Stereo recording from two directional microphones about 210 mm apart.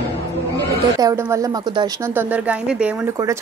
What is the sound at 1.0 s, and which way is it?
A woman's voice, 15° right (ahead or behind).